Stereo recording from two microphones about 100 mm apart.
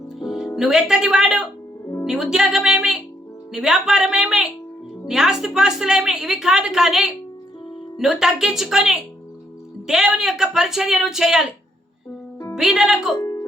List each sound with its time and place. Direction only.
0.3 s a woman's voice: centre (ahead or behind)
12.5 s a woman's voice: 5° right (ahead or behind)
13.1 s music: 35° left (ahead or behind)